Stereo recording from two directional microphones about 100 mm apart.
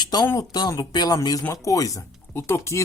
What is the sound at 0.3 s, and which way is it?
Speech, 40° left (ahead or behind).